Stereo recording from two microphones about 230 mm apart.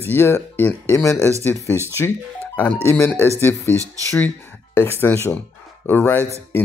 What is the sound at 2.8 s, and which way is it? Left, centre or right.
Speech, centre.